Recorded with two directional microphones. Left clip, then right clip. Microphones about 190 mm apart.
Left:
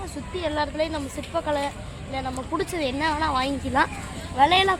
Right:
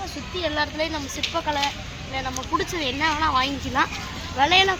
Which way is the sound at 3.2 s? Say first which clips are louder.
Right 2 dB; 75° left (ahead or behind).